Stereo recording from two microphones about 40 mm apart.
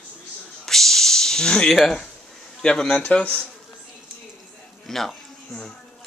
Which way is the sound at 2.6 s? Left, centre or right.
Centre.